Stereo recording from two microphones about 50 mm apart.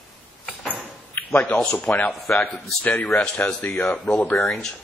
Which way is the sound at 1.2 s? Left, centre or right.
Left.